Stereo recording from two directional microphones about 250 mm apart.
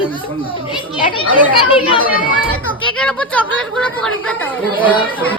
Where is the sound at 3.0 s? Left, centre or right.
Centre.